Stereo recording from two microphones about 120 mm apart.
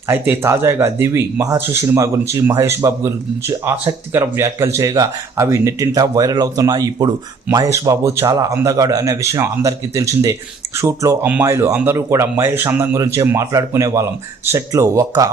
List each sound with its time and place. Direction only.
0.1 s speech: 20° right (ahead or behind)